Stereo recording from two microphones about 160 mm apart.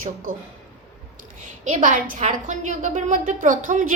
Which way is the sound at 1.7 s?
55° right (ahead or behind).